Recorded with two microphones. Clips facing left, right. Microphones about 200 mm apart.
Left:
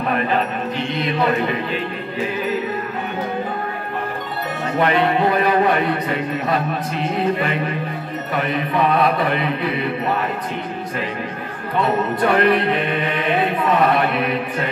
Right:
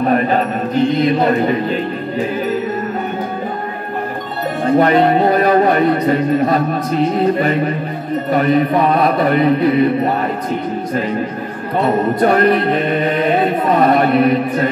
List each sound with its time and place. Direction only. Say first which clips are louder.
0.0 s speech: right 6 dB; 40° right (ahead or behind)
4.6 s a man's voice: right 7 dB; 40° right (ahead or behind)
11.8 s a man's voice: right 5 dB; 40° right (ahead or behind)